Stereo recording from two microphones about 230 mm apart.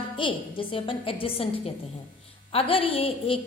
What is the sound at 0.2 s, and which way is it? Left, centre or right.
A woman's voice, left.